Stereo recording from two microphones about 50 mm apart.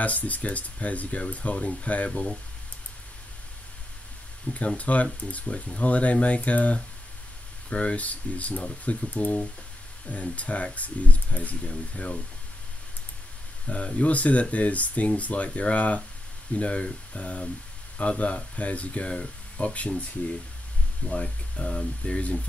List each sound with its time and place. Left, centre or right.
0.0 s speech: left
4.6 s speech: left
13.7 s speech: left
21.1 s speech: left